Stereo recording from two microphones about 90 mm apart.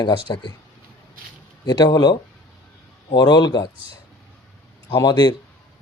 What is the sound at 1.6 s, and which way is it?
Speech, 50° left (ahead or behind).